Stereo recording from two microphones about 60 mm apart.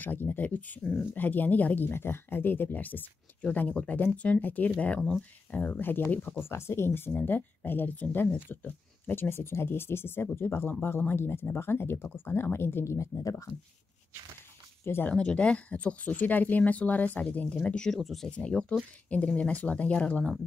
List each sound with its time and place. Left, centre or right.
0.0 s speech: left
5.8 s speech: left
6.0 s speech: left
6.5 s speech: left
13.1 s speech: left
15.0 s speech: centre
17.9 s speech: centre
18.3 s speech: centre